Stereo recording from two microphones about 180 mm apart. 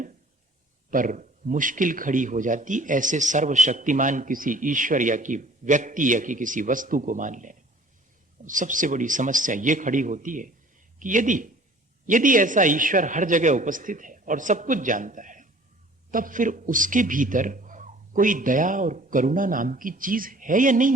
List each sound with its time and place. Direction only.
0.9 s a man's voice: 45° right (ahead or behind)